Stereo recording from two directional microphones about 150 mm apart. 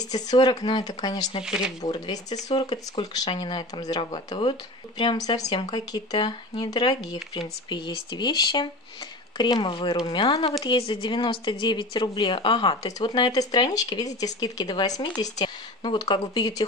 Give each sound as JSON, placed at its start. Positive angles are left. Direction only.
{"t": 0.1, "sound": "speech", "side_deg": 25}
{"t": 1.4, "sound": "speech", "side_deg": -5}
{"t": 1.8, "sound": "speech", "side_deg": 25}